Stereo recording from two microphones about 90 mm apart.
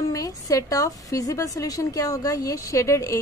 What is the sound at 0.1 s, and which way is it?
A woman's voice, 40° left (ahead or behind).